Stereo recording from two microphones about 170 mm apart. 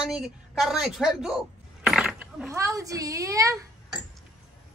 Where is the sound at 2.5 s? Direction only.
20° right (ahead or behind).